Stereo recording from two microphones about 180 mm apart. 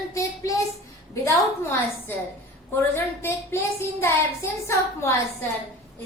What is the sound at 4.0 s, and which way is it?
A woman's voice, 15° left (ahead or behind).